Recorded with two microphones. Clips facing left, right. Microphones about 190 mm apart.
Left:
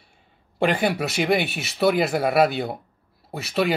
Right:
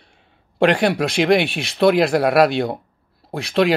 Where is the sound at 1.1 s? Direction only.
75° right (ahead or behind).